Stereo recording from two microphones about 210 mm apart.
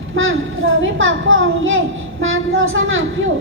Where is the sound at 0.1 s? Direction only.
70° right (ahead or behind).